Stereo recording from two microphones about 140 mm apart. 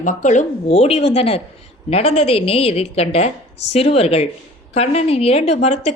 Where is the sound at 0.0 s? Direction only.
60° left (ahead or behind).